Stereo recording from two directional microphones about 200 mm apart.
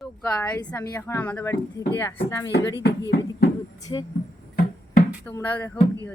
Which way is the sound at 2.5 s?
60° left (ahead or behind).